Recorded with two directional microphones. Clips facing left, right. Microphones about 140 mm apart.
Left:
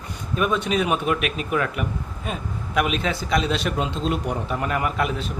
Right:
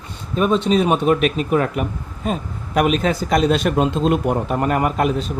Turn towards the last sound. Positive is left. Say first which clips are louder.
# right 6 dB
turn(degrees=-40)  # may be behind; listen again after turning